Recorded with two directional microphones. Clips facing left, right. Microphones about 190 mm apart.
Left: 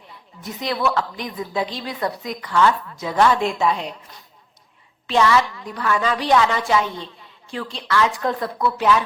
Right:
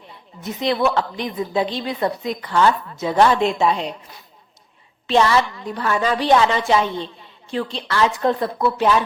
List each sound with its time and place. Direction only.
0.1 s a woman's voice: 25° right (ahead or behind)
5.0 s a woman's voice: 30° right (ahead or behind)